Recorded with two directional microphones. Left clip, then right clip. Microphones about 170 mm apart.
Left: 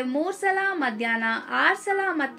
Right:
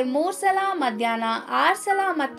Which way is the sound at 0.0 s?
35° right (ahead or behind).